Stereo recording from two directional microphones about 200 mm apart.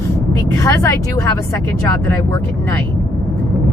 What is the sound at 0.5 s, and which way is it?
Speech, 15° left (ahead or behind).